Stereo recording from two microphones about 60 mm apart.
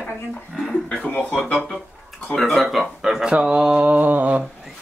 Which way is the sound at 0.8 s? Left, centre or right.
Centre.